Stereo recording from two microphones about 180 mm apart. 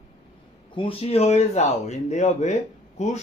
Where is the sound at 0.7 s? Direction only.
30° left (ahead or behind).